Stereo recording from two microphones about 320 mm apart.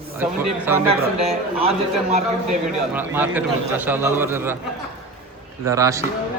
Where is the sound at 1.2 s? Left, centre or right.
Centre.